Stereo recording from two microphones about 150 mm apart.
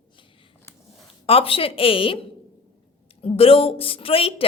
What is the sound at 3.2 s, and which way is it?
A woman's voice, 40° left (ahead or behind).